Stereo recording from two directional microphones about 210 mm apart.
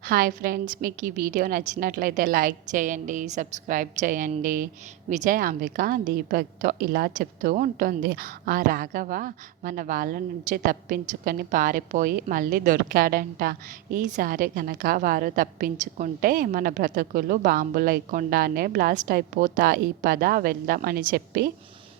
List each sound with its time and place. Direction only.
0.0 s a woman's voice: 45° right (ahead or behind)